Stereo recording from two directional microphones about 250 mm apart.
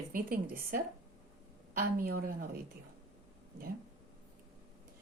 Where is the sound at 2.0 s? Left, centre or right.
Right.